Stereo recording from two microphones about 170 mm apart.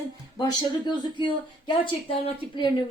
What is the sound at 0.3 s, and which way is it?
A woman's voice, 25° left (ahead or behind).